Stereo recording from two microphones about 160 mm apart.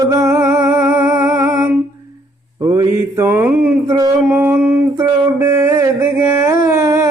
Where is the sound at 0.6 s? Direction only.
10° right (ahead or behind).